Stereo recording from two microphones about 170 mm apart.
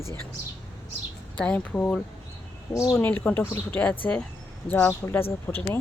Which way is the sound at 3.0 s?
10° left (ahead or behind).